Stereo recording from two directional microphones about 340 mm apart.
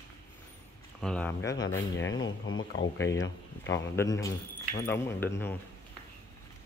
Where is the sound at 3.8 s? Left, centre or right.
Centre.